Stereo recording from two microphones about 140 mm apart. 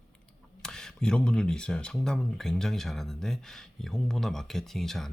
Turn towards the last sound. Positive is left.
turn(degrees=0)  # may be behind; listen again after turning